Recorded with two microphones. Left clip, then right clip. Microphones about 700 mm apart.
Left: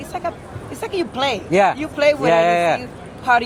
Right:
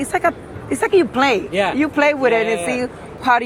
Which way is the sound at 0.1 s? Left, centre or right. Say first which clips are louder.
Right 6 dB; right.